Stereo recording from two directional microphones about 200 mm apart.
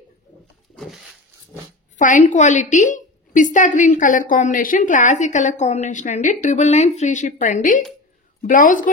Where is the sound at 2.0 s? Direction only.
40° left (ahead or behind).